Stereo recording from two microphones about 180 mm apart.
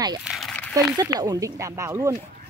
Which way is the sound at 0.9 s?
20° right (ahead or behind).